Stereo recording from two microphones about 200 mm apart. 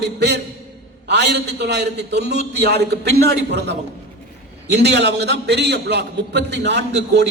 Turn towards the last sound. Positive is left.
turn(degrees=-55)  # may be behind; listen again after turning